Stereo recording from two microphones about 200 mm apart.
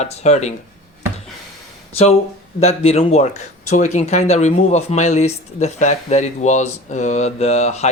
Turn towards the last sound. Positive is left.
turn(degrees=35)  # may be behind; listen again after turning